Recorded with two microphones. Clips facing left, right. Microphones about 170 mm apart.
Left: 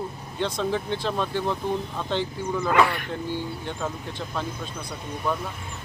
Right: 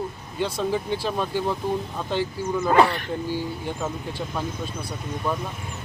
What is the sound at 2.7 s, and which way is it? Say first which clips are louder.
Speech: right 3 dB; 30° right (ahead or behind).